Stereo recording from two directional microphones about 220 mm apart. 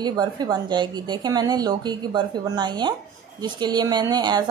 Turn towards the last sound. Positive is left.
turn(degrees=-20)  # may be behind; listen again after turning